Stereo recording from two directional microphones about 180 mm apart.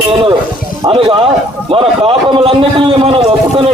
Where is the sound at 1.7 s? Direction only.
30° right (ahead or behind).